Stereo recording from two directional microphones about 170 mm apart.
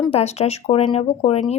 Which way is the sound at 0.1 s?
40° left (ahead or behind).